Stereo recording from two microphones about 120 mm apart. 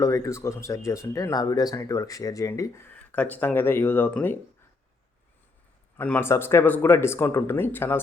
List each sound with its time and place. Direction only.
0.0 s speech: 25° left (ahead or behind)
2.9 s speech: 15° left (ahead or behind)
6.0 s speech: 15° left (ahead or behind)